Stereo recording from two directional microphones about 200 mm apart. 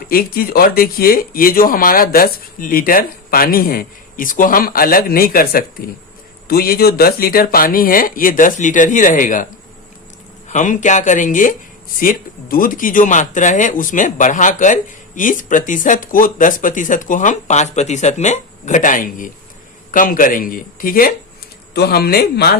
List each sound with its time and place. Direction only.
0.1 s speech: 50° left (ahead or behind)
10.5 s speech: 40° left (ahead or behind)